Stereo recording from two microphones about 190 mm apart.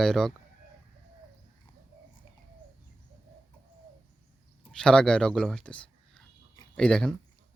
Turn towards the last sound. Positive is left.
turn(degrees=5)  # may be behind; listen again after turning